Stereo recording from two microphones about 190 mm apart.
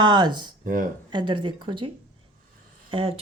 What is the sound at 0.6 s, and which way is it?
Speech, 45° right (ahead or behind).